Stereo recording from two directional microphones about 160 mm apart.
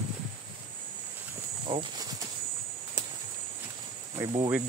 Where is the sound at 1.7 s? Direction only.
30° right (ahead or behind).